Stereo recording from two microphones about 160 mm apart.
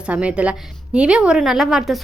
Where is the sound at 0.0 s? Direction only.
5° right (ahead or behind).